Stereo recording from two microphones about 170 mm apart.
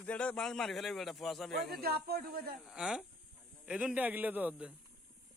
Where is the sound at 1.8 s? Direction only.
65° right (ahead or behind).